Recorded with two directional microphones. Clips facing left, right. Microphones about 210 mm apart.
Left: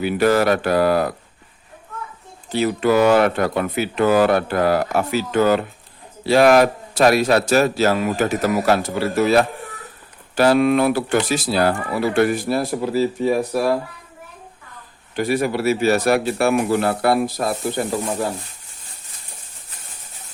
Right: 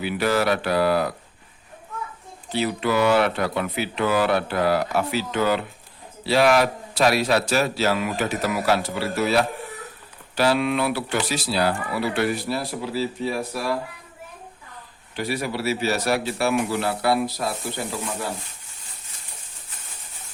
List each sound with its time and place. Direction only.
0.0 s speech: 45° left (ahead or behind)
2.5 s speech: 45° left (ahead or behind)
15.1 s speech: 50° left (ahead or behind)